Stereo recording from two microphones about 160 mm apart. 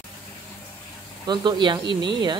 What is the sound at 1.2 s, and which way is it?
Speech, 25° right (ahead or behind).